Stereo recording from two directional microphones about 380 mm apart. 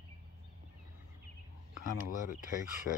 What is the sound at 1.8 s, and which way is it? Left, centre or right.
Speech, left.